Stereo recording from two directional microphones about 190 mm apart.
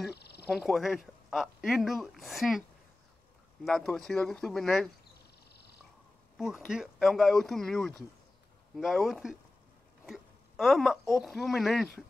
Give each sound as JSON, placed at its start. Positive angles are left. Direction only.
{"t": 0.1, "sound": "a sound", "side_deg": 60}
{"t": 0.5, "sound": "speech", "side_deg": 0}
{"t": 3.6, "sound": "speech", "side_deg": 0}
{"t": 6.3, "sound": "speech", "side_deg": -5}